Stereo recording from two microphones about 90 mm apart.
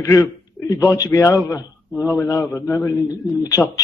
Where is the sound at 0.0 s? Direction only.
35° left (ahead or behind).